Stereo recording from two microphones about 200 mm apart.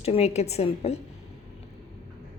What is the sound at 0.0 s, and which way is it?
Speech, 30° left (ahead or behind).